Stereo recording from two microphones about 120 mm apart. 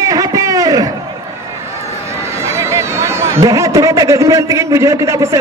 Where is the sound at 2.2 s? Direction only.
25° right (ahead or behind).